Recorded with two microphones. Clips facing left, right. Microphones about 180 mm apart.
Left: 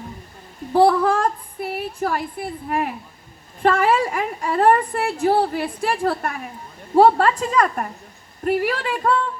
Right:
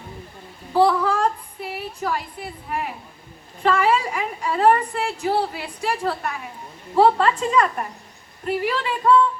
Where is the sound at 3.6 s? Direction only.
50° left (ahead or behind).